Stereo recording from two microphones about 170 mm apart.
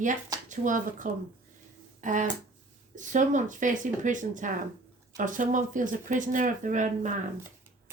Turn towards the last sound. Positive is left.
turn(degrees=-50)  # may be behind; listen again after turning